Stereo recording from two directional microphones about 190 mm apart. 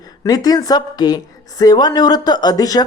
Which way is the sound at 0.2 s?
20° left (ahead or behind).